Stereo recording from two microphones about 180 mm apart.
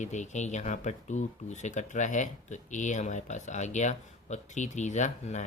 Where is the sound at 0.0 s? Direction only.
40° left (ahead or behind).